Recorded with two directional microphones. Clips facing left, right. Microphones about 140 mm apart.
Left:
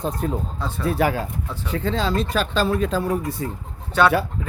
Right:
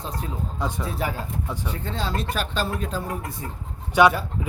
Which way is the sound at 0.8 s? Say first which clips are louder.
Left 7 dB; 80° left.